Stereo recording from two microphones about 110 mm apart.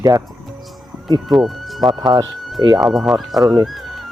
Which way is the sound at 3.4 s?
35° right (ahead or behind).